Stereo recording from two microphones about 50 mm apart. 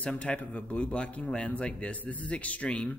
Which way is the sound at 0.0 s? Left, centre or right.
Left.